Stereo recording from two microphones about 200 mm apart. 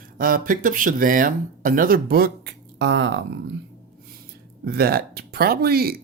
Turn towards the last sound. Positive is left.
turn(degrees=-50)  # may be behind; listen again after turning